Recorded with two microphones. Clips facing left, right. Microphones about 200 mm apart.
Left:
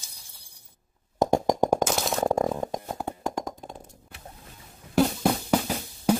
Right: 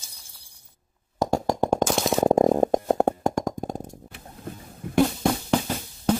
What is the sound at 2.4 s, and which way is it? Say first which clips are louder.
Stomach rumble: right 8 dB; 40° right (ahead or behind).